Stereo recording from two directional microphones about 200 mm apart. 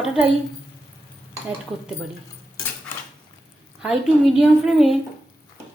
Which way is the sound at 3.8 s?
Centre (ahead or behind).